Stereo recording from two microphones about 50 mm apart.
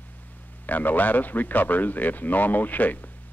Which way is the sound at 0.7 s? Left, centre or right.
Left.